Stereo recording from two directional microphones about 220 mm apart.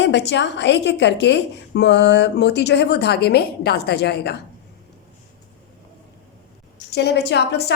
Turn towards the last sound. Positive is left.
turn(degrees=50)  # may be behind; listen again after turning